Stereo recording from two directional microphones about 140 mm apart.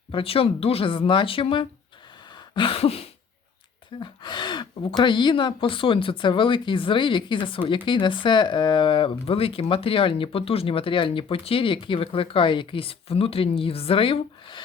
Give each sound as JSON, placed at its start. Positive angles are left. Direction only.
{"t": 0.1, "sound": "speech", "side_deg": 40}
{"t": 2.6, "sound": "a sound", "side_deg": 40}
{"t": 4.0, "sound": "speech", "side_deg": 35}